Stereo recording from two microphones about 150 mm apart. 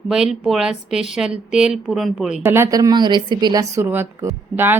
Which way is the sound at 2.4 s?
15° right (ahead or behind).